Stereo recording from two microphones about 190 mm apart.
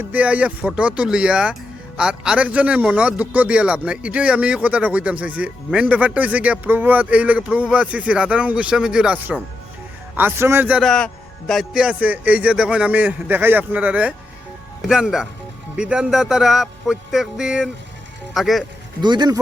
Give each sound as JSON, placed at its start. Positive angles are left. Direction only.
{"t": 0.1, "sound": "a man's voice", "side_deg": -5}
{"t": 19.0, "sound": "speech", "side_deg": -20}